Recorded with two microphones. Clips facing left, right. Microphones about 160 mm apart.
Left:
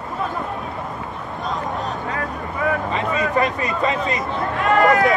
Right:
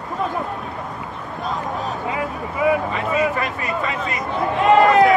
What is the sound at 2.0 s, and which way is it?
Vehicle, 10° right (ahead or behind).